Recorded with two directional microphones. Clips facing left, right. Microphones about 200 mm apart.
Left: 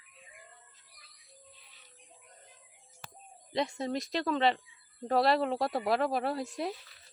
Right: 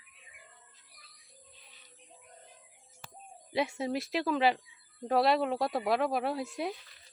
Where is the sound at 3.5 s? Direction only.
5° right (ahead or behind).